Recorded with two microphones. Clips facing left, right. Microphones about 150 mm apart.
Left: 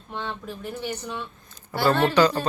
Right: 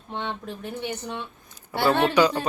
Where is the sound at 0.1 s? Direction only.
20° right (ahead or behind).